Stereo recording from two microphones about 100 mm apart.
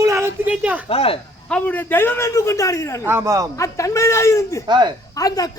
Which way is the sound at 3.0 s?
25° right (ahead or behind).